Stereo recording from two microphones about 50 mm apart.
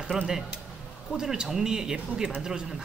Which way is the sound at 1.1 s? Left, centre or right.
Centre.